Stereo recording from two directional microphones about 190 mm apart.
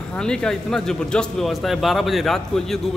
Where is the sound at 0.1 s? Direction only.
5° left (ahead or behind).